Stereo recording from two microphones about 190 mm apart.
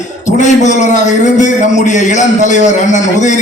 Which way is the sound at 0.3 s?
40° left (ahead or behind).